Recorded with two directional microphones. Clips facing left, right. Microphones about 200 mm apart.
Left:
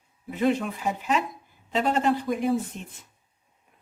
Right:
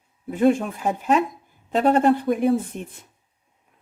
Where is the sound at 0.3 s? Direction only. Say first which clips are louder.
Right 5 dB; 50° right (ahead or behind).